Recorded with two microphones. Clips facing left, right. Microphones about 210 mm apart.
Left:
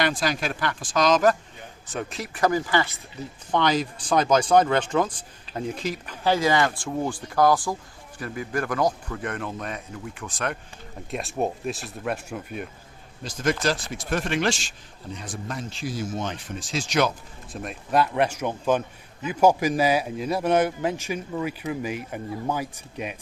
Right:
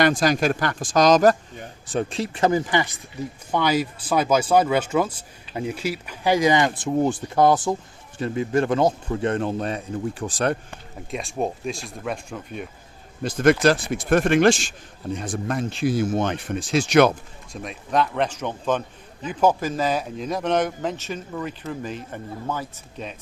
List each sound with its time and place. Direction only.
0.0 s a man's voice: 45° right (ahead or behind)
11.1 s speech: centre (ahead or behind)
13.2 s speech: 60° right (ahead or behind)
17.5 s speech: 5° left (ahead or behind)